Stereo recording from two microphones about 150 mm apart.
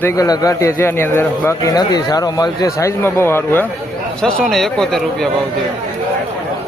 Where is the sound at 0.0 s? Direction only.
20° left (ahead or behind).